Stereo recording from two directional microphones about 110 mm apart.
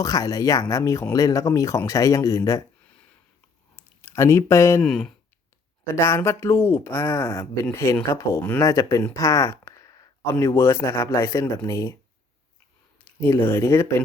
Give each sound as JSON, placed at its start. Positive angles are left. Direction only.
{"t": 0.0, "sound": "speech", "side_deg": 30}
{"t": 3.8, "sound": "speech", "side_deg": 25}
{"t": 4.8, "sound": "speech", "side_deg": 5}
{"t": 5.8, "sound": "speech", "side_deg": 25}
{"t": 9.1, "sound": "a sound", "side_deg": 30}
{"t": 10.4, "sound": "speech", "side_deg": 25}
{"t": 13.1, "sound": "speech", "side_deg": 20}